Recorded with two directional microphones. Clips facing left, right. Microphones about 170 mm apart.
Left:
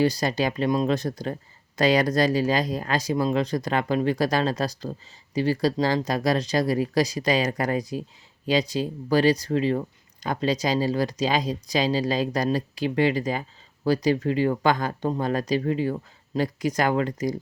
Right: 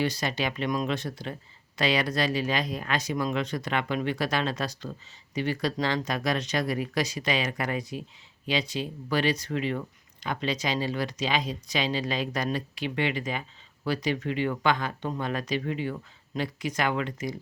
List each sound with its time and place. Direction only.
0.0 s speech: 35° left (ahead or behind)